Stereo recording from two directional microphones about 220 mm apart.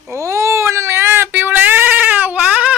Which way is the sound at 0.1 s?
15° right (ahead or behind).